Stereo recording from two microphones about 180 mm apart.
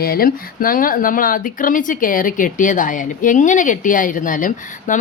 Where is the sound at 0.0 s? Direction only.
55° left (ahead or behind).